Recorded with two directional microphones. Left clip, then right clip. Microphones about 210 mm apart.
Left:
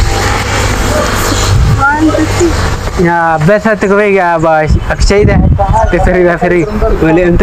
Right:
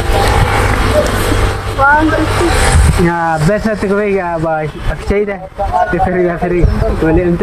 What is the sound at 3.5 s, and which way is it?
Speech, 20° left (ahead or behind).